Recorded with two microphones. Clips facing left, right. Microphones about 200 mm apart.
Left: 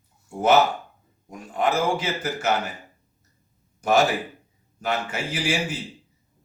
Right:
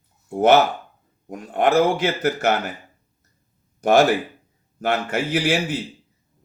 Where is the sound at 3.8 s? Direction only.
60° right (ahead or behind).